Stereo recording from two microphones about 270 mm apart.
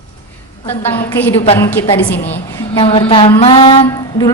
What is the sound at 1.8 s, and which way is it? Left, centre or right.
Speech, centre.